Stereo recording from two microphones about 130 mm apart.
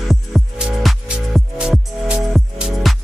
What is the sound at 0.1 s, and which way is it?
Music, centre (ahead or behind).